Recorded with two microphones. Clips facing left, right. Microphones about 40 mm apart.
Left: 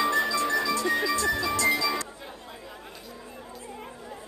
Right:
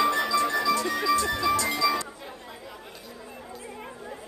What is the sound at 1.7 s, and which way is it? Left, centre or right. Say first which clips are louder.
Music: right 1 dB; centre.